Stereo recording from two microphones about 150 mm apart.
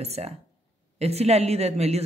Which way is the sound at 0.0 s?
45° right (ahead or behind).